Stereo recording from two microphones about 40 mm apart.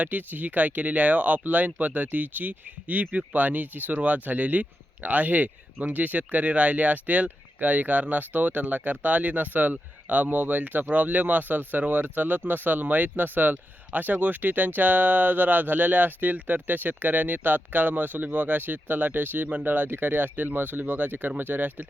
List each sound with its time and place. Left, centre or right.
0.0 s speech: right